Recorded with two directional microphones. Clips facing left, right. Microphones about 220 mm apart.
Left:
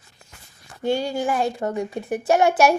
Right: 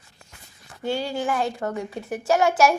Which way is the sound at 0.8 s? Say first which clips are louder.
Left 3 dB; 15° left (ahead or behind).